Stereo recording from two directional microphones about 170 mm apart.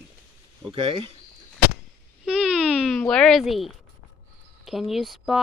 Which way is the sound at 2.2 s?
5° right (ahead or behind).